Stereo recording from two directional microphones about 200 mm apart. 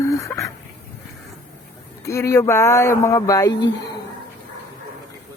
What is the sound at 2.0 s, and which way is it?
Speech, 15° left (ahead or behind).